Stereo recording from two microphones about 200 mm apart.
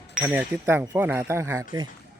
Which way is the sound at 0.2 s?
10° right (ahead or behind).